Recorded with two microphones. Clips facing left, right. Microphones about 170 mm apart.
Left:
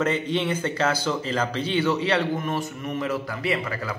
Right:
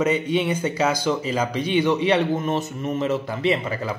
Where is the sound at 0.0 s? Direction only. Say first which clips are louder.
Right 3 dB; 10° right (ahead or behind).